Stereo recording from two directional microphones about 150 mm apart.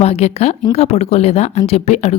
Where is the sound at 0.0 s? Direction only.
45° left (ahead or behind).